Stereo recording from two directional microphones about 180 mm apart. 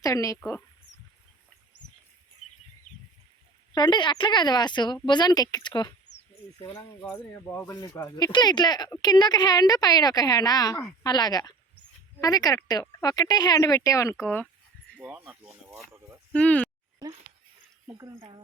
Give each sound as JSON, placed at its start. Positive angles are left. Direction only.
{"t": 0.0, "sound": "speech", "side_deg": 20}
{"t": 3.7, "sound": "speech", "side_deg": 25}
{"t": 7.0, "sound": "speech", "side_deg": 10}
{"t": 14.9, "sound": "speech", "side_deg": -5}
{"t": 16.3, "sound": "speech", "side_deg": 5}
{"t": 17.8, "sound": "speech", "side_deg": -15}